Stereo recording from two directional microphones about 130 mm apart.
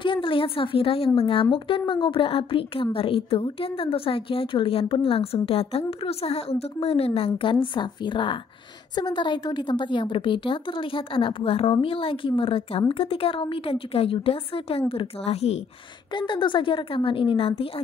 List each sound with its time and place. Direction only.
0.0 s a woman's voice: 40° left (ahead or behind)
16.1 s a woman's voice: 40° left (ahead or behind)